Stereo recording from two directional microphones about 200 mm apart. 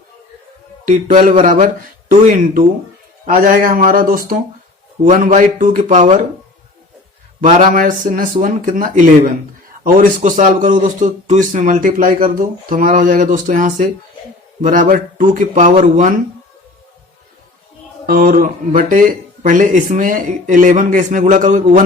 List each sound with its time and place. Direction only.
0.9 s a man's voice: 40° right (ahead or behind)
7.4 s a man's voice: 40° right (ahead or behind)
18.0 s a man's voice: 45° right (ahead or behind)